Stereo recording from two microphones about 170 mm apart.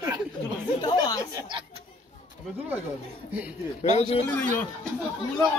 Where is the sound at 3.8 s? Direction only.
40° left (ahead or behind).